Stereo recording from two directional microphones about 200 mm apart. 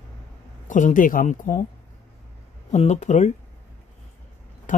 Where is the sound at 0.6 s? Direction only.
40° left (ahead or behind).